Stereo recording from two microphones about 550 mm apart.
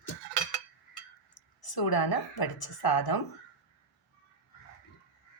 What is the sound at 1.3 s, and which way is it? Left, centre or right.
A woman's voice, left.